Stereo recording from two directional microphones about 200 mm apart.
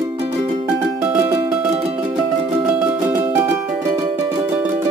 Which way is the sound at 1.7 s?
30° right (ahead or behind).